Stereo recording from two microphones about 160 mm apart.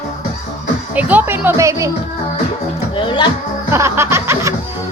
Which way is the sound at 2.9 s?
30° left (ahead or behind).